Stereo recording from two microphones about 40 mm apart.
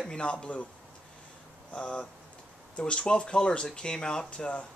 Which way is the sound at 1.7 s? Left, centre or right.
Left.